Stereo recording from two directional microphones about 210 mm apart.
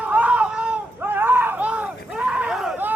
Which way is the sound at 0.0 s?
5° right (ahead or behind).